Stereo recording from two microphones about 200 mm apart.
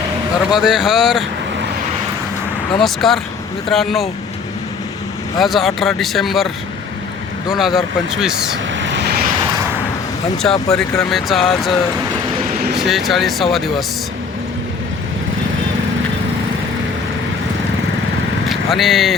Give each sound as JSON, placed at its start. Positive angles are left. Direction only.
{"t": 0.5, "sound": "speech", "side_deg": 0}
{"t": 2.8, "sound": "speech", "side_deg": 0}
{"t": 5.4, "sound": "speech", "side_deg": 0}
{"t": 7.5, "sound": "speech", "side_deg": 0}
{"t": 8.7, "sound": "vehicle", "side_deg": -65}
{"t": 10.4, "sound": "speech", "side_deg": 10}
{"t": 12.6, "sound": "a sound", "side_deg": -55}
{"t": 12.9, "sound": "speech", "side_deg": 0}
{"t": 18.4, "sound": "speech", "side_deg": 0}